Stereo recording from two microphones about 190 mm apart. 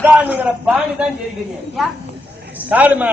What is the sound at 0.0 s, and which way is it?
A man's voice, 10° right (ahead or behind).